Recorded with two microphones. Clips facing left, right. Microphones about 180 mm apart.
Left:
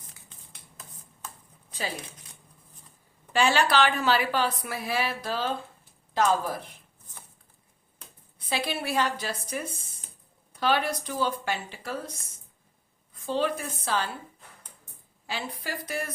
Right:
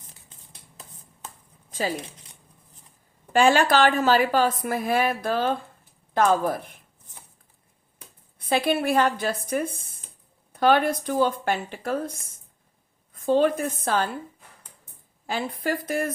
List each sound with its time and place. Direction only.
3.3 s a woman's voice: 50° right (ahead or behind)
8.4 s a woman's voice: 50° right (ahead or behind)
13.1 s a woman's voice: 50° right (ahead or behind)
15.3 s a woman's voice: 50° right (ahead or behind)